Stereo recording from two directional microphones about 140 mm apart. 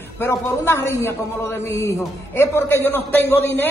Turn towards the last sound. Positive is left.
turn(degrees=15)  # may be behind; listen again after turning